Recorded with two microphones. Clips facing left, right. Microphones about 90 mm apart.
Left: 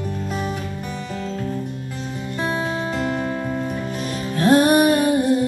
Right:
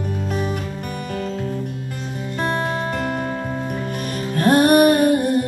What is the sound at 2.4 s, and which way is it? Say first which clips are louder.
Music: right 1 dB; 55° right (ahead or behind).